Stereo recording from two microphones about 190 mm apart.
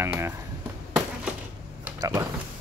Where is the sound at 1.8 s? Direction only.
15° right (ahead or behind).